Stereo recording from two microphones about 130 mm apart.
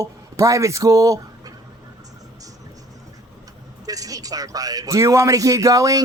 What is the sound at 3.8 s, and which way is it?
Speech, 30° right (ahead or behind).